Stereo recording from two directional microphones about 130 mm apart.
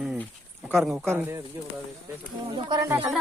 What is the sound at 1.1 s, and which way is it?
Speech, 20° right (ahead or behind).